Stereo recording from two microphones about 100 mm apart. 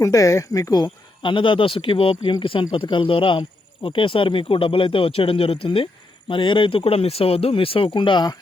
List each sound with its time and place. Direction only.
0.0 s speech: 35° left (ahead or behind); by 8.4 s 50° left (ahead or behind)